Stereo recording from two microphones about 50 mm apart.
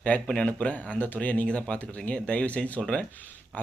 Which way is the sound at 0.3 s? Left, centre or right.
Left.